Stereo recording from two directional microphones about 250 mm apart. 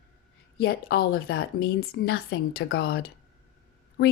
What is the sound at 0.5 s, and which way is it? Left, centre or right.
A woman's voice, left.